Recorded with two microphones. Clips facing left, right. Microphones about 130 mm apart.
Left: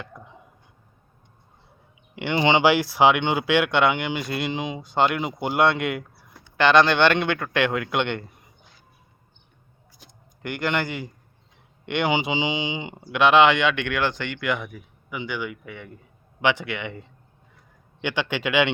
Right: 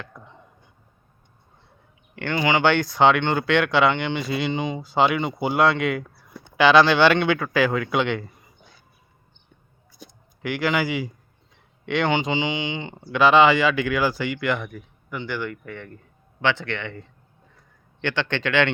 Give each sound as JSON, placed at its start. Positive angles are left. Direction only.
{"t": 0.1, "sound": "a sound", "side_deg": 10}
{"t": 2.1, "sound": "speech", "side_deg": 20}
{"t": 2.6, "sound": "speech", "side_deg": 5}
{"t": 10.4, "sound": "speech", "side_deg": 0}
{"t": 11.9, "sound": "speech", "side_deg": 5}
{"t": 13.1, "sound": "speech", "side_deg": 0}